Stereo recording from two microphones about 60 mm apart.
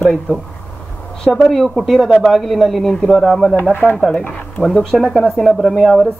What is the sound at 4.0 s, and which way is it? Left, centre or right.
A man's voice, centre.